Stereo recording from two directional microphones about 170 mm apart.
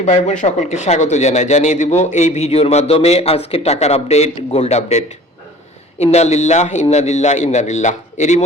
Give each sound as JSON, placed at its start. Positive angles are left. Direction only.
{"t": 0.0, "sound": "speech", "side_deg": 45}